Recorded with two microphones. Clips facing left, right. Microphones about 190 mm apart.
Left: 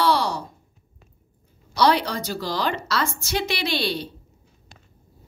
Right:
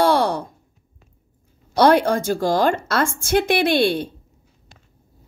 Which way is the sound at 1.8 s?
50° right (ahead or behind).